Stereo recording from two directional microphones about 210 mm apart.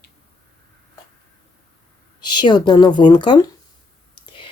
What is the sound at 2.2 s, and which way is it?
Speech, 20° left (ahead or behind).